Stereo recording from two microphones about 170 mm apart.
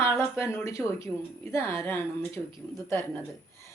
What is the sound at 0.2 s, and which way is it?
A woman's voice, 15° left (ahead or behind).